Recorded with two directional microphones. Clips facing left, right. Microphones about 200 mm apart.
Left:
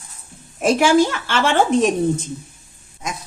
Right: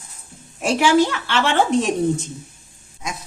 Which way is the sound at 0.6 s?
50° left (ahead or behind).